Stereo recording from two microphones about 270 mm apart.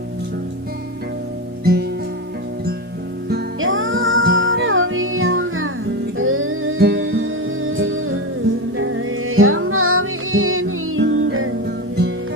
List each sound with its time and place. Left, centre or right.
1.6 s music: right
3.2 s music: right
11.6 s music: right